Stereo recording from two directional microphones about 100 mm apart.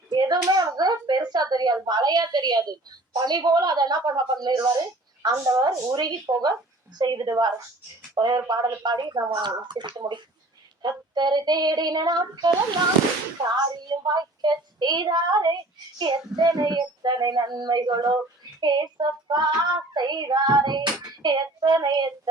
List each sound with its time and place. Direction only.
0.1 s hands: 45° right (ahead or behind)
0.8 s a sound: 45° right (ahead or behind)
3.2 s child singing: 45° right (ahead or behind)
5.2 s a woman's voice: 40° right (ahead or behind)
7.0 s child singing: 45° right (ahead or behind)
8.1 s a woman's voice: 50° right (ahead or behind)
8.4 s child singing: 40° right (ahead or behind)
13.8 s child singing: 45° right (ahead or behind)